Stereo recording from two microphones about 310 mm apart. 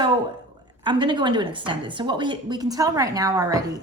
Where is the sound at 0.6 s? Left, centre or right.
Centre.